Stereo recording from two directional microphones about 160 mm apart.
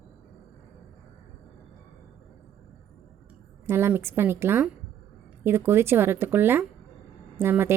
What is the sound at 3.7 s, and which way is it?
A woman's voice, 15° right (ahead or behind).